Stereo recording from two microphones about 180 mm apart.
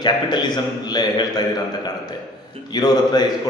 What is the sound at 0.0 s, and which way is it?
A man's voice, 25° left (ahead or behind).